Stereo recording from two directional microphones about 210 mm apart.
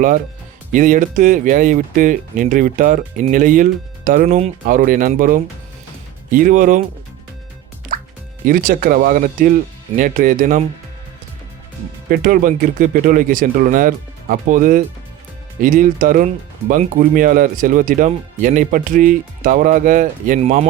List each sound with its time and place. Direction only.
0.7 s speech: 40° right (ahead or behind)
8.4 s speech: 40° right (ahead or behind)
12.0 s speech: 40° right (ahead or behind)